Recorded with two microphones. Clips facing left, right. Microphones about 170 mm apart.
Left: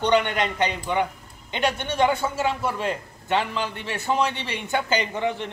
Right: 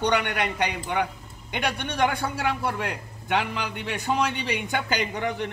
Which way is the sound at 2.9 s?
15° right (ahead or behind).